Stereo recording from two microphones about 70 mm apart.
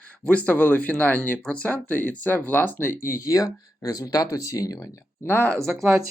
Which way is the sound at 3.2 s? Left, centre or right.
Left.